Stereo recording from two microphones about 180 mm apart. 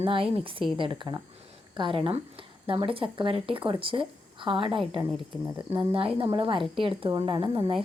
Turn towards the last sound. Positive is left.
turn(degrees=-25)  # may be behind; listen again after turning